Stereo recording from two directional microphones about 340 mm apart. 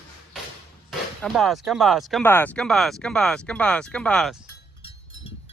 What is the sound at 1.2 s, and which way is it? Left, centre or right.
Speech, centre.